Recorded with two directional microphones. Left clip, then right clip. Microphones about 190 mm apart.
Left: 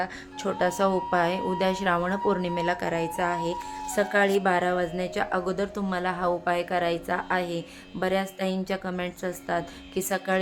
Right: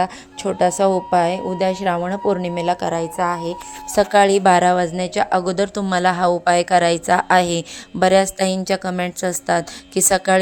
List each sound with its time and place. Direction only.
0.4 s a woman's voice: 25° right (ahead or behind)